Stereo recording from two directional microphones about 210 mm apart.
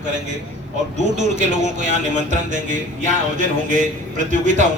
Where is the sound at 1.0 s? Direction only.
35° right (ahead or behind).